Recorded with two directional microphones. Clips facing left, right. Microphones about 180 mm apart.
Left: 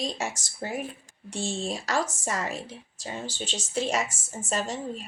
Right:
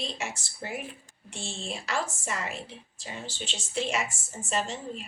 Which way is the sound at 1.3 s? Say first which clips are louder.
Left 7 dB; 40° left (ahead or behind).